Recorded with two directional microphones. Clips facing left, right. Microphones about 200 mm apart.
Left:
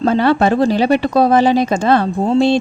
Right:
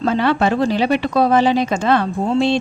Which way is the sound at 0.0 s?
40° left (ahead or behind).